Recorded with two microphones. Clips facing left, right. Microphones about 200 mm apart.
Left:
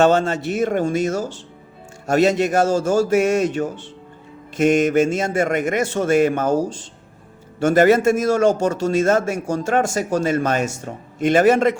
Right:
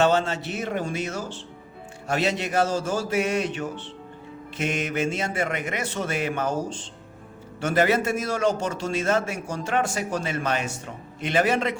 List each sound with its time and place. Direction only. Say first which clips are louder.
0.0 s a man's voice: left 5 dB; 50° left (ahead or behind)